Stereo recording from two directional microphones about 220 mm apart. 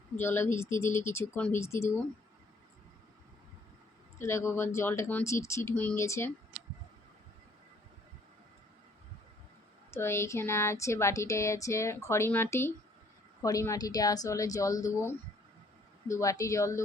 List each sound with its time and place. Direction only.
0.2 s speech: 10° left (ahead or behind)
4.2 s speech: 15° left (ahead or behind)
9.9 s speech: 10° left (ahead or behind)